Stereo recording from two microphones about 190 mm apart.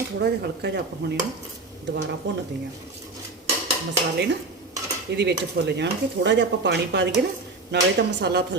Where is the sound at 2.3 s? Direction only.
65° right (ahead or behind).